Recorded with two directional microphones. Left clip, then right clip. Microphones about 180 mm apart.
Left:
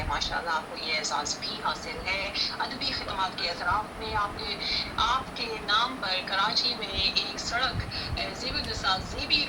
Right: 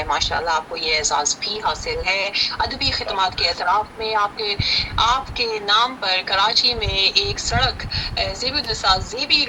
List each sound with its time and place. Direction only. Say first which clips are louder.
0.1 s speech: right 9 dB; 50° right (ahead or behind)